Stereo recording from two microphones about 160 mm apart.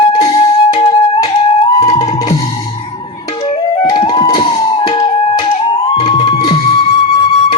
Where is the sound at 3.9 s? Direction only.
30° left (ahead or behind).